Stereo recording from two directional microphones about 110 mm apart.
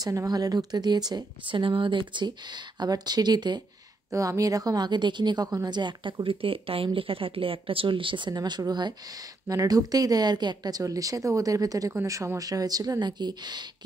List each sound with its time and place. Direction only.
0.0 s speech: 35° right (ahead or behind)
4.1 s speech: 30° right (ahead or behind)